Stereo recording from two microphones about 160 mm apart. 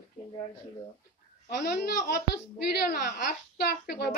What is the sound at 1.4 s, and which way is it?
A woman's voice, 80° left.